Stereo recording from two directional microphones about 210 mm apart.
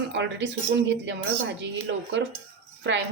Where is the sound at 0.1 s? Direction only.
55° right (ahead or behind).